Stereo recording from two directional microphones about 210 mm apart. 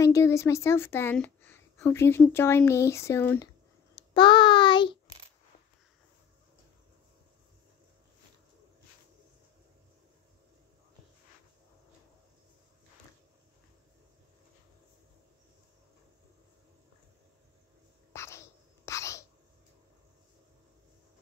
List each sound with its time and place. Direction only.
0.0 s a woman's voice: 15° left (ahead or behind)
4.1 s child singing: 20° left (ahead or behind)
18.1 s whispering: 15° left (ahead or behind)